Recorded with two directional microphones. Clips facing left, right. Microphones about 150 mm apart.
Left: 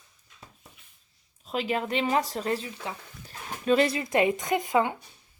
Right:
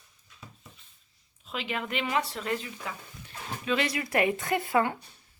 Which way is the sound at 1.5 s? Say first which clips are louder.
Left 5 dB; 40° left (ahead or behind).